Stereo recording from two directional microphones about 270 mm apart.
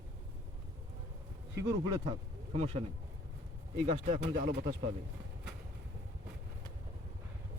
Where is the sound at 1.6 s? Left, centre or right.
Centre.